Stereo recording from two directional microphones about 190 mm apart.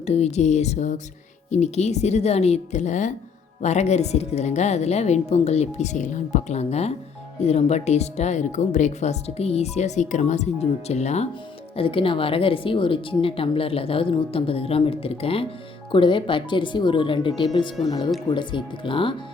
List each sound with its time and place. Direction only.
0.0 s speech: 35° left (ahead or behind)